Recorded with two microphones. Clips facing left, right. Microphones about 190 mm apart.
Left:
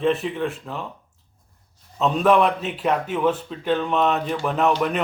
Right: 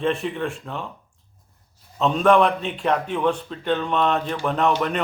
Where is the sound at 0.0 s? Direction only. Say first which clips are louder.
Left 2 dB; centre (ahead or behind).